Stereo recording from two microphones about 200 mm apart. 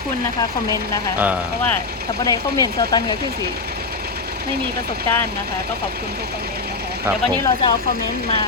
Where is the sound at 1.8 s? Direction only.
50° right (ahead or behind).